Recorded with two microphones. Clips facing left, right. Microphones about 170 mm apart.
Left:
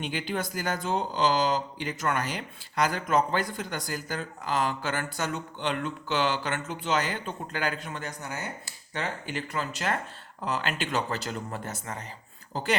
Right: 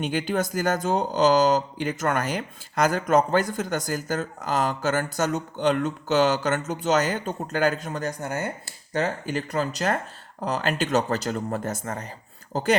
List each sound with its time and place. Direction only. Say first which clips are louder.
0.0 s speech: right 6 dB; 45° right (ahead or behind)